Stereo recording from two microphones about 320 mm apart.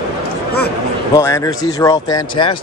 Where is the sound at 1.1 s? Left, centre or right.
Centre.